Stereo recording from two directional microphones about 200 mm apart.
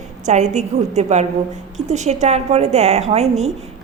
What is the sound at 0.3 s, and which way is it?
A woman's voice, 35° right (ahead or behind).